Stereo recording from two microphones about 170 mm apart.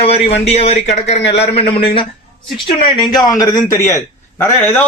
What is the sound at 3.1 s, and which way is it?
A man's voice, 20° left (ahead or behind).